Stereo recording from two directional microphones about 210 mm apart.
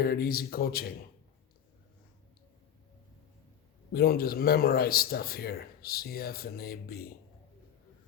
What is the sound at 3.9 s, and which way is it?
Speech, 45° left (ahead or behind).